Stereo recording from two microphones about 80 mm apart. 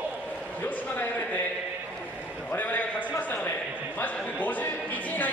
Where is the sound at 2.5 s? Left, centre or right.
Left.